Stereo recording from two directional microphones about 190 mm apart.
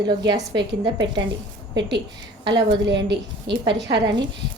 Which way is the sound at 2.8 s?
65° right (ahead or behind).